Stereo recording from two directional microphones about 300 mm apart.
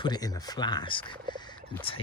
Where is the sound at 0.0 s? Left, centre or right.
Centre.